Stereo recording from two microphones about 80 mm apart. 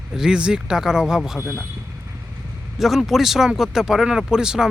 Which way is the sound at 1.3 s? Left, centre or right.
Left.